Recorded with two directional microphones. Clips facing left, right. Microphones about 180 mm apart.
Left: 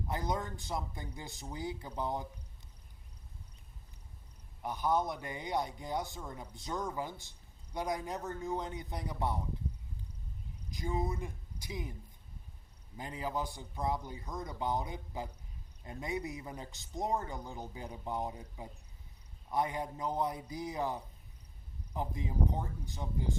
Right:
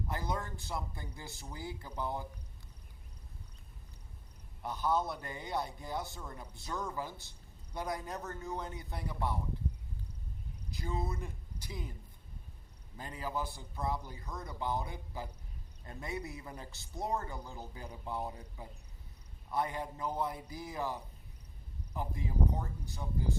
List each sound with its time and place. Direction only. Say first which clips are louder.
0.1 s a man's voice: left 3 dB; 20° left (ahead or behind)
4.6 s a man's voice: left 1 dB; 15° left (ahead or behind)
10.7 s speech: left 3 dB; 15° left (ahead or behind)
13.0 s a man's voice: left 1 dB; 20° left (ahead or behind)